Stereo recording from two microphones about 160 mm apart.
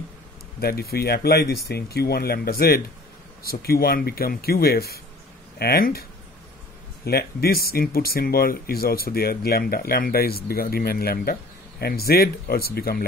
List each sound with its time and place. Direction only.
0.6 s speech: 75° left (ahead or behind)
7.1 s speech: 80° left